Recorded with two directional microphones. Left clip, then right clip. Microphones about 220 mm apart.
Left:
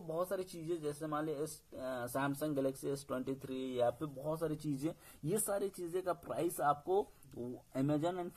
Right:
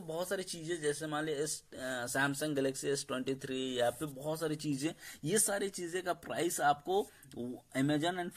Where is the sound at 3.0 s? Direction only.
50° right (ahead or behind).